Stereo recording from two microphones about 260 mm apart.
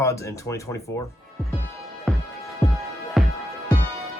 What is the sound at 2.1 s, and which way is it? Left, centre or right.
Music, centre.